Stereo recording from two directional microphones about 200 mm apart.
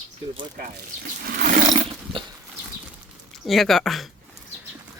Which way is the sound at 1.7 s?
25° right (ahead or behind).